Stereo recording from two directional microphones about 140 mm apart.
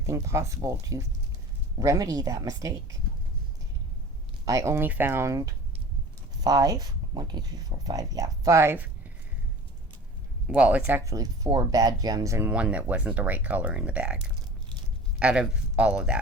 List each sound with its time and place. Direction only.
0.0 s speech: 20° right (ahead or behind)
4.4 s speech: 20° right (ahead or behind)
10.4 s speech: 10° right (ahead or behind)
12.5 s speech: 10° right (ahead or behind)